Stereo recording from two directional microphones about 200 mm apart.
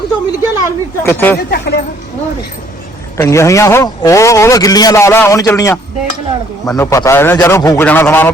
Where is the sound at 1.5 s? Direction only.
55° left (ahead or behind).